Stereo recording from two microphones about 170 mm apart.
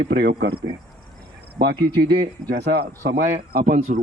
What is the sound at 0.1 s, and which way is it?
Speech, 75° right (ahead or behind).